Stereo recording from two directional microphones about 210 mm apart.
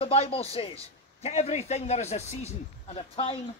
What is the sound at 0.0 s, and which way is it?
A man's voice, 30° left (ahead or behind).